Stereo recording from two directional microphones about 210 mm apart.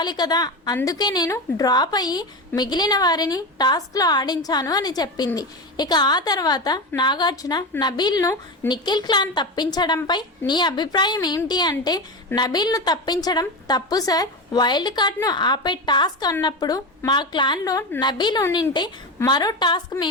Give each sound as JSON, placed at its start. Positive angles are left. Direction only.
{"t": 0.0, "sound": "a woman's voice", "side_deg": 20}